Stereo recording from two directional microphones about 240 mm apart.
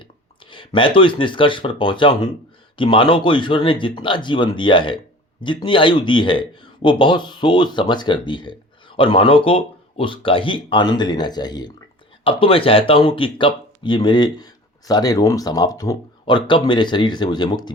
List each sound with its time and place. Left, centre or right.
0.5 s speech: left